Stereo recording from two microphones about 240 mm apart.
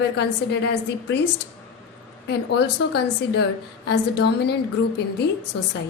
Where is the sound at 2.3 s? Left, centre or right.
Left.